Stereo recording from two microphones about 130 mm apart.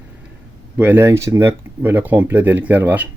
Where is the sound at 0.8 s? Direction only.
15° right (ahead or behind).